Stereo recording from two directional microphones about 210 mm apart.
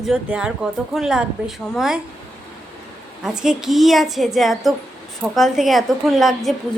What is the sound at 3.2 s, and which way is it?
A woman's voice, 5° right (ahead or behind).